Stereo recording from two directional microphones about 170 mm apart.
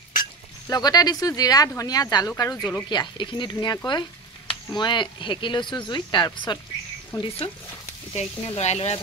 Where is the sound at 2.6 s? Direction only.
10° left (ahead or behind).